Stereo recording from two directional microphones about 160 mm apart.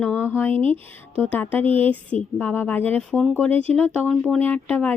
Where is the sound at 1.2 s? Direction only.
10° left (ahead or behind).